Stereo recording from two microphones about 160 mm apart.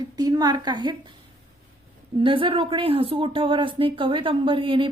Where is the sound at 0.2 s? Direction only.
25° right (ahead or behind).